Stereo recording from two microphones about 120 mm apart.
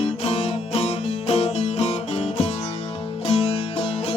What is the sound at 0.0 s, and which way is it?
Music, 55° left (ahead or behind).